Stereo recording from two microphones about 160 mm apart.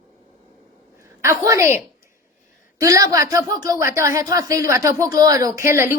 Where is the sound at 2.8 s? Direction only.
20° right (ahead or behind).